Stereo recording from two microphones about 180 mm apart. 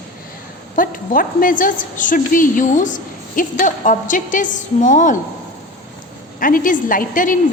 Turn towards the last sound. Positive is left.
turn(degrees=50)  # may be behind; listen again after turning